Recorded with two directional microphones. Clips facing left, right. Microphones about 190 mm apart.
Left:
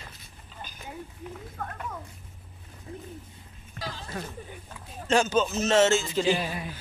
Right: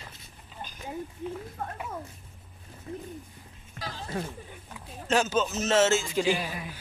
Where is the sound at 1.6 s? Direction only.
25° right (ahead or behind).